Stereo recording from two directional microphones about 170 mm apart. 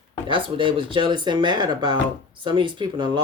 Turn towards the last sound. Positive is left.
turn(degrees=-25)  # may be behind; listen again after turning